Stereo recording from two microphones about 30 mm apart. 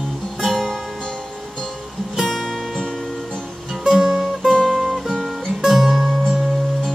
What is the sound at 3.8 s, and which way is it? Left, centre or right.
Music, centre.